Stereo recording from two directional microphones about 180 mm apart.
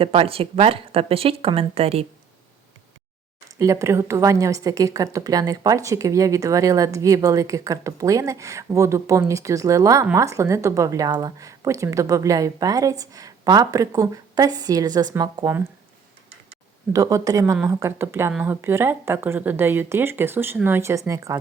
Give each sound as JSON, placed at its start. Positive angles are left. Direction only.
{"t": 0.0, "sound": "speech", "side_deg": -30}
{"t": 3.6, "sound": "a woman's voice", "side_deg": -15}
{"t": 16.9, "sound": "a woman's voice", "side_deg": -20}